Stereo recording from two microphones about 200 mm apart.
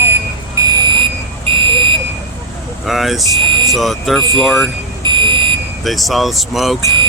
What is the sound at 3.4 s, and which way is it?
Vehicle, 25° right (ahead or behind).